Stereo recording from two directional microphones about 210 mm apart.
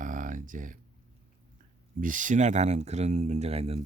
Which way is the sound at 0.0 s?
40° right (ahead or behind).